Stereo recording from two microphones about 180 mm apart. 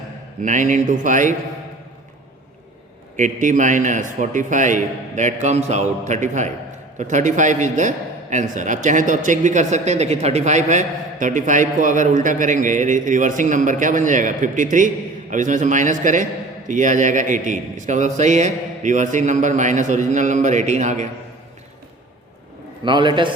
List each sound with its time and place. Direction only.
0.4 s a man's voice: 45° right (ahead or behind)
3.2 s a man's voice: 45° right (ahead or behind)
22.8 s a man's voice: 25° right (ahead or behind)